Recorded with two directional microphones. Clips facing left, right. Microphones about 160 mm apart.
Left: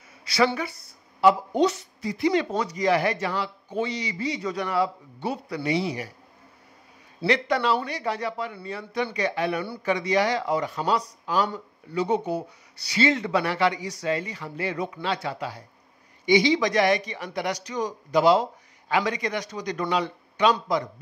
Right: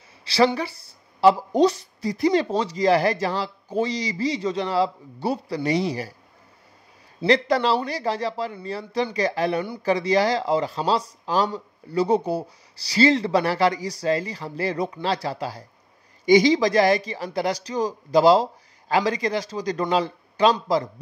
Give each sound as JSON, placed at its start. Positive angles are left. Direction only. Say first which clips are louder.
{"t": 0.2, "sound": "a sound", "louder": "right 3 dB", "side_deg": -30}
{"t": 0.6, "sound": "a woman's voice", "louder": "right 2 dB", "side_deg": -30}
{"t": 7.2, "sound": "a woman's voice", "louder": "right 3 dB", "side_deg": -35}